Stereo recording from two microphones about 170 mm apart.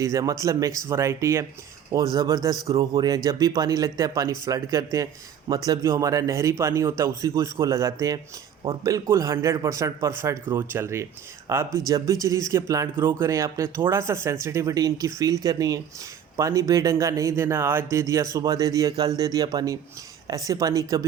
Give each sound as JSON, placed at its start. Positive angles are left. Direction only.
{"t": 0.0, "sound": "speech", "side_deg": -20}